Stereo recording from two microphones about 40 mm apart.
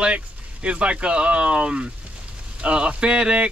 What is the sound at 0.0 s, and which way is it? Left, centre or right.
Speech, right.